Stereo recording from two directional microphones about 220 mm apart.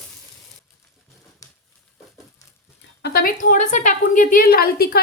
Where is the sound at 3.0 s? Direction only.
45° left (ahead or behind).